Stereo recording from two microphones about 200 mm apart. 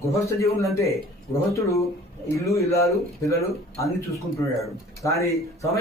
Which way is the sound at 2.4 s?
15° left (ahead or behind).